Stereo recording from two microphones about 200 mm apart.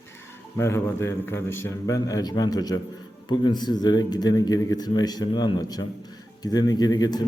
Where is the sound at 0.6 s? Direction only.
15° left (ahead or behind).